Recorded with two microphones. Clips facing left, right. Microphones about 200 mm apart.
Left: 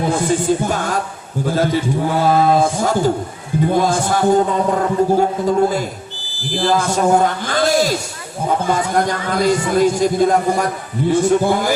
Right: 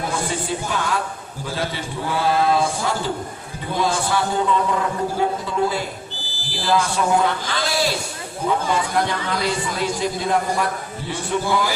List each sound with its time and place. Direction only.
0.1 s music: 45° left (ahead or behind)
1.5 s speech: 45° left (ahead or behind)